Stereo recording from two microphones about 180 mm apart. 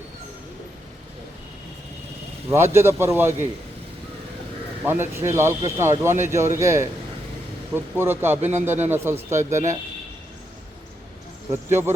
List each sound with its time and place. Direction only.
2.7 s a man's voice: 15° right (ahead or behind)
4.8 s a man's voice: 15° right (ahead or behind)
11.5 s a man's voice: 15° right (ahead or behind)